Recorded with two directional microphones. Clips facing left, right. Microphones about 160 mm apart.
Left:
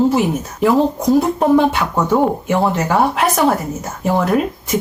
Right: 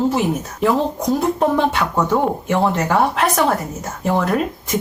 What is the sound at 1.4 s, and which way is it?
Speech, 5° left (ahead or behind).